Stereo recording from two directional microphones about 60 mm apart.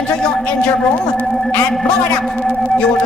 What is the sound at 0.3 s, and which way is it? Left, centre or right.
A man's voice, centre.